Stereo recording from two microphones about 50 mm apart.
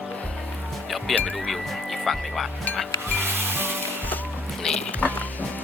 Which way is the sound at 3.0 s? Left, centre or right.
Right.